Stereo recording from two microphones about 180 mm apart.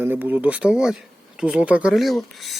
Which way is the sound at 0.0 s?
10° right (ahead or behind).